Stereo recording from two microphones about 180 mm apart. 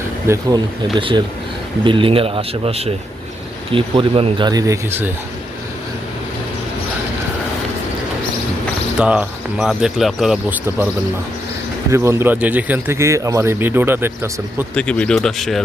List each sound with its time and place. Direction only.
0.3 s speech: 15° right (ahead or behind)
0.9 s speech: 25° right (ahead or behind)
9.0 s speech: 5° right (ahead or behind)
11.9 s speech: 15° right (ahead or behind)
14.8 s speech: 5° left (ahead or behind)